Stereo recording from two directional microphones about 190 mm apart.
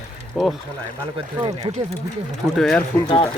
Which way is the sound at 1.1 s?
25° right (ahead or behind).